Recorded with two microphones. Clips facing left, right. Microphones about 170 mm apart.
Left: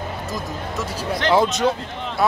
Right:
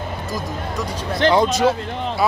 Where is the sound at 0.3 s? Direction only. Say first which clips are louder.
Right 2 dB; 5° left (ahead or behind).